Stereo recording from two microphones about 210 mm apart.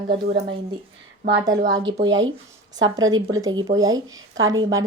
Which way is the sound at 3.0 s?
75° right (ahead or behind).